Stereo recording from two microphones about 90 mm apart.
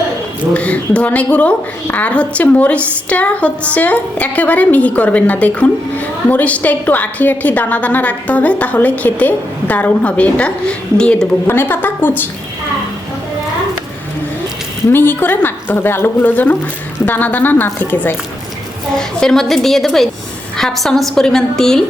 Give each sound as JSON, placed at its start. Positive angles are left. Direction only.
{"t": 0.5, "sound": "a woman's voice", "side_deg": 15}
{"t": 11.4, "sound": "a woman's voice", "side_deg": 25}
{"t": 14.8, "sound": "a woman's voice", "side_deg": 25}
{"t": 18.9, "sound": "a woman's voice", "side_deg": 5}